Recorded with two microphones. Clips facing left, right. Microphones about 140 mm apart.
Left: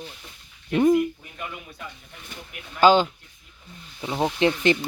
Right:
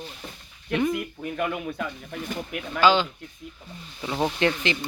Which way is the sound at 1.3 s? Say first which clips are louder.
Right 10 dB; 65° right (ahead or behind).